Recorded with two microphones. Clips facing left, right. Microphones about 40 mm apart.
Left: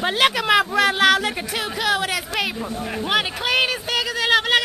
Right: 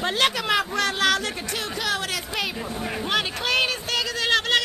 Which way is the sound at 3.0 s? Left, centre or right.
Centre.